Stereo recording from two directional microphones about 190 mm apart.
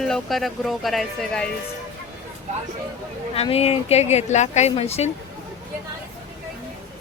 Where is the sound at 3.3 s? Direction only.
30° left (ahead or behind).